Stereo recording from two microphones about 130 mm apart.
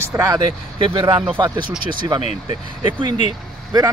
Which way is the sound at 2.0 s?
35° right (ahead or behind).